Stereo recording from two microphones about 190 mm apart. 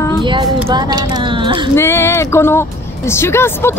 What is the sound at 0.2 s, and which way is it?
Speech, 25° right (ahead or behind).